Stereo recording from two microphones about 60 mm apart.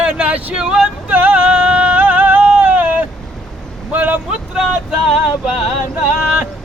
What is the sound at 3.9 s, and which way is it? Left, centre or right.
Vehicle, right.